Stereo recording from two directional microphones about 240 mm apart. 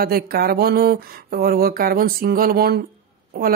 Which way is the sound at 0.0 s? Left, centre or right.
Right.